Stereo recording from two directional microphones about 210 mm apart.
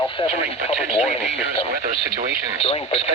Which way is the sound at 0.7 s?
30° left (ahead or behind).